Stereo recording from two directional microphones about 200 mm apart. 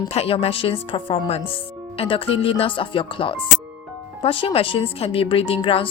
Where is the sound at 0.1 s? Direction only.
30° left (ahead or behind).